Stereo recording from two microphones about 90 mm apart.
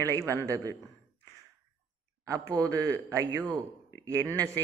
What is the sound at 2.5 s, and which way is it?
Speech, 35° right (ahead or behind).